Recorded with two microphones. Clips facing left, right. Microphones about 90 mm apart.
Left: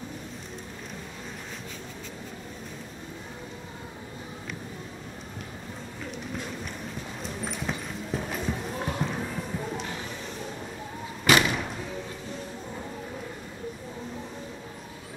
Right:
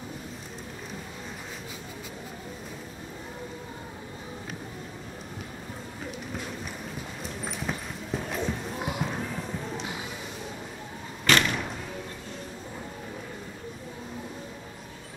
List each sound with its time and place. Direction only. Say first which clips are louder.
6.1 s a sound: left 3 dB; 5° right (ahead or behind)
8.8 s music: even; 10° right (ahead or behind)
11.2 s thump: left 2 dB; 10° left (ahead or behind)